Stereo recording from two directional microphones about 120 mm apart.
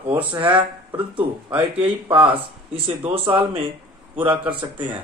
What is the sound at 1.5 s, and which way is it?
Speech, 15° right (ahead or behind).